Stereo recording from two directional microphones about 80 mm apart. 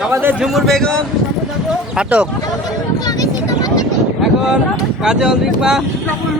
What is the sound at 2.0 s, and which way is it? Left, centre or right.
Speech, centre.